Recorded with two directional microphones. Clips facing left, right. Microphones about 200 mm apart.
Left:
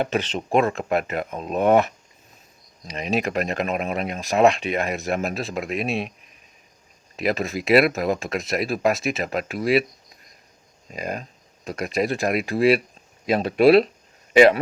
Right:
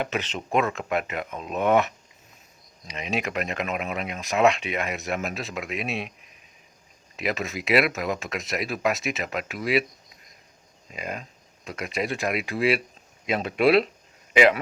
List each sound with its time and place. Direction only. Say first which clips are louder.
0.0 s speech: left 5 dB; 30° left (ahead or behind)
7.2 s speech: left 5 dB; 35° left (ahead or behind)
10.9 s speech: left 4 dB; 40° left (ahead or behind)